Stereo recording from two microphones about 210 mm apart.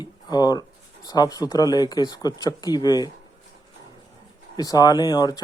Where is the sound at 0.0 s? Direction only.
20° left (ahead or behind).